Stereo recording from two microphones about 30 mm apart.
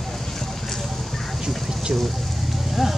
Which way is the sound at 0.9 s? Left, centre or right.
Centre.